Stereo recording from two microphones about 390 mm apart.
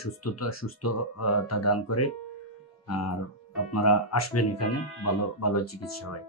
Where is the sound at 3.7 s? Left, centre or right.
Left.